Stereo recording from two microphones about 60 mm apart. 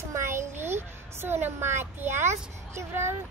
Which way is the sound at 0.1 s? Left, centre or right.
Right.